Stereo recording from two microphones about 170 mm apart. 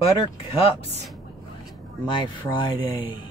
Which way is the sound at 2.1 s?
25° left (ahead or behind).